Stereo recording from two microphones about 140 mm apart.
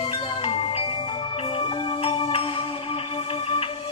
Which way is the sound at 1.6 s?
40° left (ahead or behind).